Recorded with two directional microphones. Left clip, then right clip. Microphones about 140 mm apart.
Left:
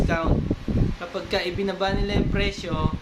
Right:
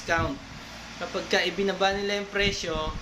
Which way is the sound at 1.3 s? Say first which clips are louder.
Right 1 dB; 10° left (ahead or behind).